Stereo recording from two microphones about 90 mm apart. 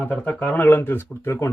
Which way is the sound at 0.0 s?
15° left (ahead or behind).